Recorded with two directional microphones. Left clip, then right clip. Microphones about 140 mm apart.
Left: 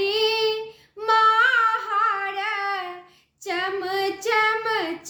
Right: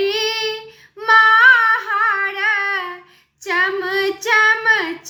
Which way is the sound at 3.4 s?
45° left (ahead or behind).